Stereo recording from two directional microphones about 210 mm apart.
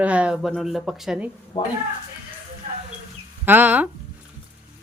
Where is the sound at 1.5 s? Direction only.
25° left (ahead or behind).